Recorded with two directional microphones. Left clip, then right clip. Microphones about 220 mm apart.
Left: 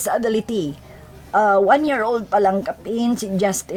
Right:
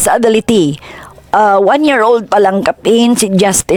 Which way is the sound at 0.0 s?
40° right (ahead or behind).